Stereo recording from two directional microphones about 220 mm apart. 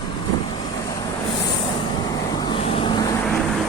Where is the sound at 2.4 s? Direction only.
20° left (ahead or behind).